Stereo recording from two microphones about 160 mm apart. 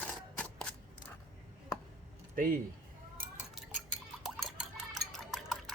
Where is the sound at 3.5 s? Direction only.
Centre (ahead or behind).